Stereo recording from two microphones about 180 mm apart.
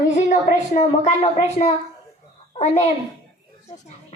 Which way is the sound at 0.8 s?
40° left (ahead or behind).